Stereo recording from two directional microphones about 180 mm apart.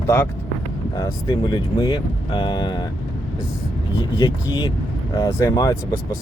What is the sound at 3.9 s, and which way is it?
Speech, 20° left (ahead or behind).